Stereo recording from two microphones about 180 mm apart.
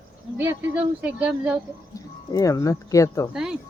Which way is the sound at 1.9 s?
20° left (ahead or behind).